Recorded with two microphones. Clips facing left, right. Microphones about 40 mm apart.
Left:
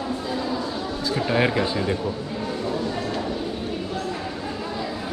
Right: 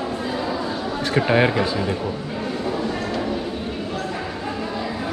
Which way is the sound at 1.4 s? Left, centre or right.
Centre.